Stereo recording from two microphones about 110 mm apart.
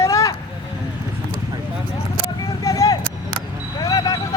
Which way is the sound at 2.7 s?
30° left (ahead or behind).